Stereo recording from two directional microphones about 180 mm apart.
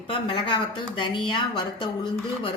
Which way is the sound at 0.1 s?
25° left (ahead or behind).